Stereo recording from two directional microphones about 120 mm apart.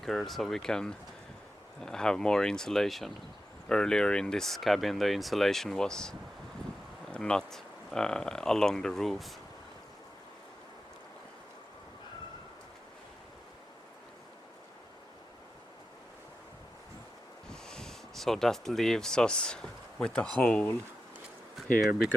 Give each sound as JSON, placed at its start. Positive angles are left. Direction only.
{"t": 0.0, "sound": "speech", "side_deg": 0}
{"t": 17.5, "sound": "speech", "side_deg": 5}